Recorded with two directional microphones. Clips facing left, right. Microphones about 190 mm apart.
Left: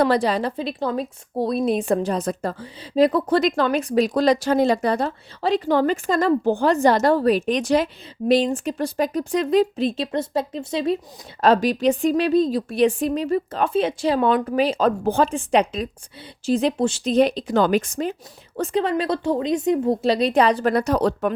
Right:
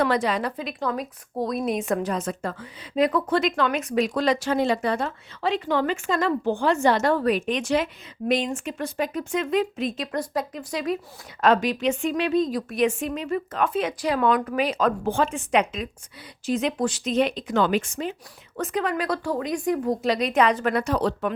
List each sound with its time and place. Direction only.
0.0 s a woman's voice: 35° left (ahead or behind)